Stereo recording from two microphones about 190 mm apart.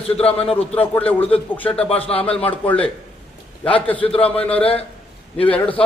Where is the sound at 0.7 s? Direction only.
10° left (ahead or behind).